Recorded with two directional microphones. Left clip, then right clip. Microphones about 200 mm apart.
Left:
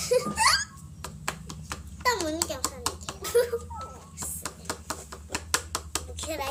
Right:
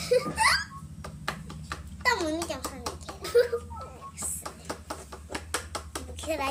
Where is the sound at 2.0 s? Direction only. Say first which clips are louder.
Even; 10° right (ahead or behind).